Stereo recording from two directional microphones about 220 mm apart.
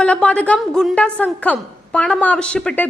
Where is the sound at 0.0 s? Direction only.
5° left (ahead or behind).